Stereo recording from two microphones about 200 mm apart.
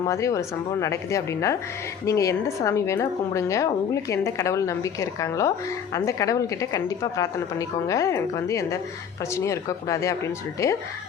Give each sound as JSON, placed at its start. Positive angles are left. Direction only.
{"t": 0.0, "sound": "a woman's voice", "side_deg": 15}